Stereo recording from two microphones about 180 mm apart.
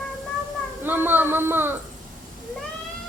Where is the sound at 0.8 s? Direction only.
10° right (ahead or behind).